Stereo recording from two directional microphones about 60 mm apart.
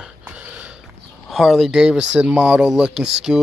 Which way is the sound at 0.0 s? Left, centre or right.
Centre.